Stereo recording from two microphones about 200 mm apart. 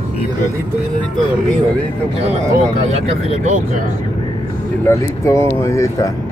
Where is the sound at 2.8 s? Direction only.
30° right (ahead or behind).